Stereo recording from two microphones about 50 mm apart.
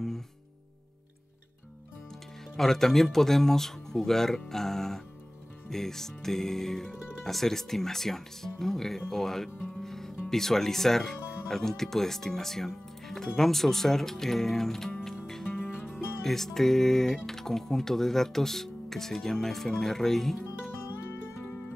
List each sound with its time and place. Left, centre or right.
2.5 s speech: centre
9.7 s music: centre
10.3 s speech: centre
15.4 s music: left
16.3 s speech: centre